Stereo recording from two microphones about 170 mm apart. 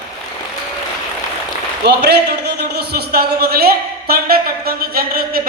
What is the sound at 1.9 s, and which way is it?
A man's voice, 80° right.